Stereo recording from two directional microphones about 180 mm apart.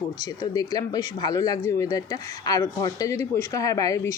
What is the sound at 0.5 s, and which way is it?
Speech, 20° left (ahead or behind).